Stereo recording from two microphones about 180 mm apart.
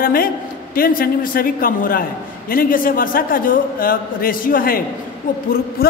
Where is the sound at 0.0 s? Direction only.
55° left (ahead or behind).